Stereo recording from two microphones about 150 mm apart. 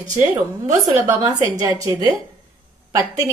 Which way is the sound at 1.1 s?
25° right (ahead or behind).